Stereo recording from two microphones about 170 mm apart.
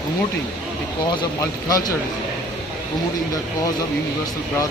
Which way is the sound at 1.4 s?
20° left (ahead or behind).